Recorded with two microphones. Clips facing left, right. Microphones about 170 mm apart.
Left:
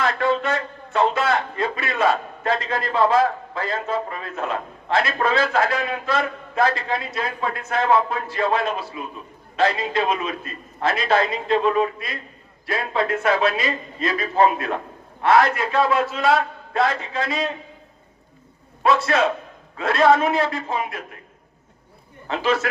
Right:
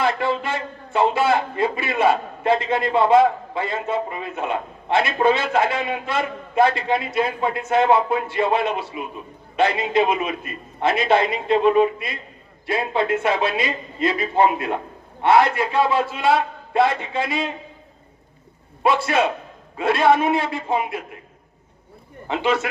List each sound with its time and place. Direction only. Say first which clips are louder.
0.0 s a man's voice: even; 30° right (ahead or behind)
18.8 s a man's voice: even; 25° right (ahead or behind)
22.3 s a man's voice: even; 25° right (ahead or behind)